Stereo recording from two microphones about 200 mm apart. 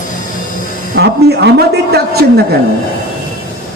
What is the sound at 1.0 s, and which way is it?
A man's voice, 55° right (ahead or behind).